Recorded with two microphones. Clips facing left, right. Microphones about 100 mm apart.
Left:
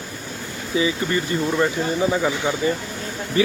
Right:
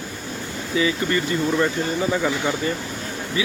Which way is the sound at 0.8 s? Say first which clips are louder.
Even; 20° left (ahead or behind).